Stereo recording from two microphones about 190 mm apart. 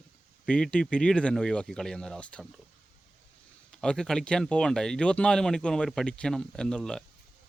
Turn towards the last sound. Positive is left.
turn(degrees=5)  # may be behind; listen again after turning